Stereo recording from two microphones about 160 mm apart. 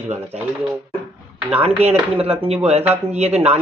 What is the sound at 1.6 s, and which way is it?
Speech, 40° right (ahead or behind).